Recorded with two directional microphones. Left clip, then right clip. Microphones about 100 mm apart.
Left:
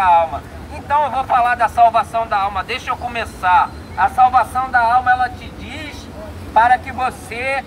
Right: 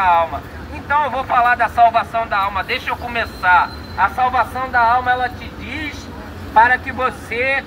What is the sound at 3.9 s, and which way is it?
Speech, 40° left (ahead or behind).